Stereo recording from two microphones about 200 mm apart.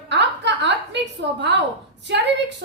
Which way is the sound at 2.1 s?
60° right (ahead or behind).